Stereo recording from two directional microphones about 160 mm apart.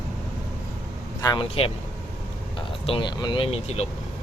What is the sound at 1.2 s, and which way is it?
Speech, 25° left (ahead or behind).